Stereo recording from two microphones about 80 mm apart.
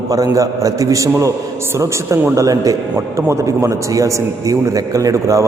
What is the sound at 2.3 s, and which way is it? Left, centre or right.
Speech, right.